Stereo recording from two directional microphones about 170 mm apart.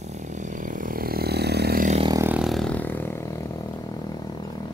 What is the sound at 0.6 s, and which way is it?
Vehicle, 50° right (ahead or behind).